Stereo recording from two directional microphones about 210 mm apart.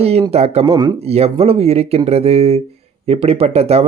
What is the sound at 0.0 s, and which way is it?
Speech, 30° right (ahead or behind).